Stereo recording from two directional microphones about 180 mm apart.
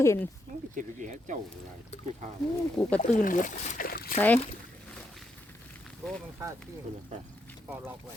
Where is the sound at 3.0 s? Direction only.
45° left (ahead or behind).